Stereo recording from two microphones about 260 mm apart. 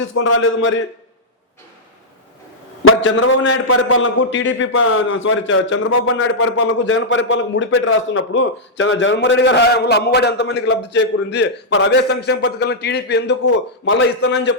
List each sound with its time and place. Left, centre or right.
0.0 s a man's voice: left
2.8 s a man's voice: left